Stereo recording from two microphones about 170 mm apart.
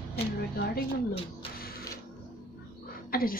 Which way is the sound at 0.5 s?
65° left (ahead or behind).